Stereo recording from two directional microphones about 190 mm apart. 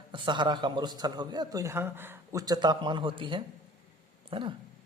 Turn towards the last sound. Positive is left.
turn(degrees=-25)  # may be behind; listen again after turning